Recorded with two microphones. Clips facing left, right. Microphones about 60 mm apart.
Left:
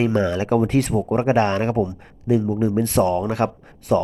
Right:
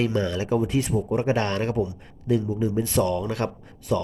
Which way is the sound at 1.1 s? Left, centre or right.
Left.